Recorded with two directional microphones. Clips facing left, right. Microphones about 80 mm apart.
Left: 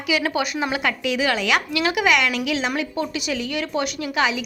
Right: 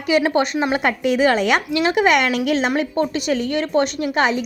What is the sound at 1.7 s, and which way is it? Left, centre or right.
A woman's voice, right.